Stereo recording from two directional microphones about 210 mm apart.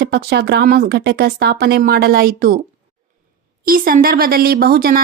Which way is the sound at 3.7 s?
45° right (ahead or behind).